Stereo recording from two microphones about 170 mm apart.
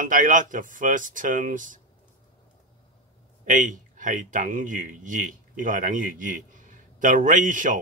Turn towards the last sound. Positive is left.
turn(degrees=-50)  # may be behind; listen again after turning